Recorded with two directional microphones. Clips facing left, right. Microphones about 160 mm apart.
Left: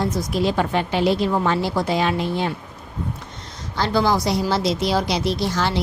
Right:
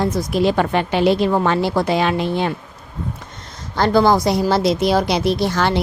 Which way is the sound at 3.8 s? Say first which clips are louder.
Right 5 dB; 50° right (ahead or behind).